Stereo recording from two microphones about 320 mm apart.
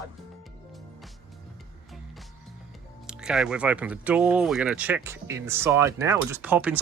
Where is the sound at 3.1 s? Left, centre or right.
Centre.